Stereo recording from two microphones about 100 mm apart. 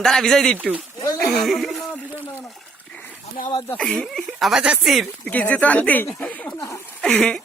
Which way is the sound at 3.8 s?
5° left (ahead or behind).